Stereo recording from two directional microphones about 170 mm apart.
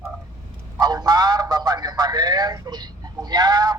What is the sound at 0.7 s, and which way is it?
A man's voice, 25° right (ahead or behind).